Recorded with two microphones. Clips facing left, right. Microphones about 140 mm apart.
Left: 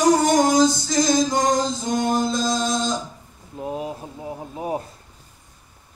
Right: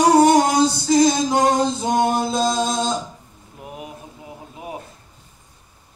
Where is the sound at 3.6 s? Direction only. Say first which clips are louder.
Left 7 dB; 30° left (ahead or behind).